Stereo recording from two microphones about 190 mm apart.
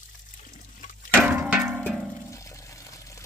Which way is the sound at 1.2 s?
10° right (ahead or behind).